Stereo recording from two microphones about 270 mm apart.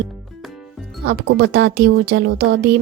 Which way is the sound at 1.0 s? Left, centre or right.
Right.